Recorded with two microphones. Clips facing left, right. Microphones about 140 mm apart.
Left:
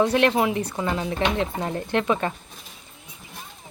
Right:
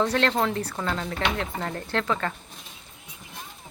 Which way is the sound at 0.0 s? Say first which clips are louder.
Left 4 dB; 15° left (ahead or behind).